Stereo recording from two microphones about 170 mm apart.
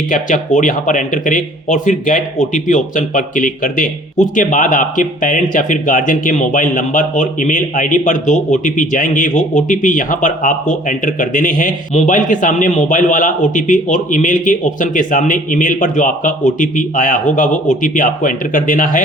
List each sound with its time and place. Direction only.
0.1 s speech: 50° left (ahead or behind)